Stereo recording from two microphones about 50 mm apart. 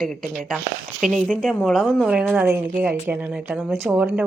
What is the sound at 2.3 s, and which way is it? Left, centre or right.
Speech, right.